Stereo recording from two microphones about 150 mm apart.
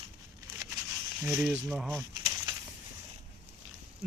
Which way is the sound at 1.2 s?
5° right (ahead or behind).